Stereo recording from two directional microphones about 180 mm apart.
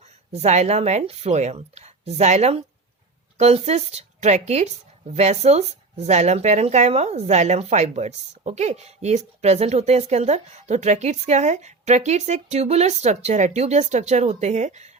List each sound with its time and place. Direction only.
0.3 s speech: 40° right (ahead or behind)